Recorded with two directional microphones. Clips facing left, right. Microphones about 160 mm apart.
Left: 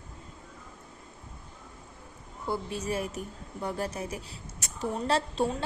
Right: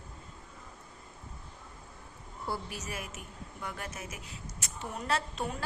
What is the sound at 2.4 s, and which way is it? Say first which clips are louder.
Speech: left 5 dB; 20° left (ahead or behind).